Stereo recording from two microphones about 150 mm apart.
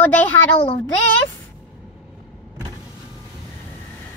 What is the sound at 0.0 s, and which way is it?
Speech, 10° left (ahead or behind).